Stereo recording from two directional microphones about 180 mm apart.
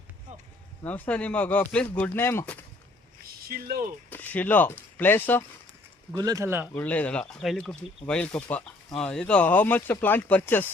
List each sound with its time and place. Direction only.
0.9 s speech: 10° left (ahead or behind)
3.5 s speech: 55° right (ahead or behind)
4.1 s speech: 10° left (ahead or behind)
6.1 s speech: 20° right (ahead or behind)
6.7 s speech: 10° left (ahead or behind)